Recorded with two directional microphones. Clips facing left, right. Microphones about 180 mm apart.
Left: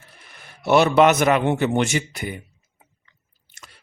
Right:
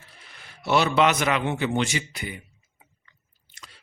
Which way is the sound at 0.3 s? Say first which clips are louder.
Left 6 dB; 50° left (ahead or behind).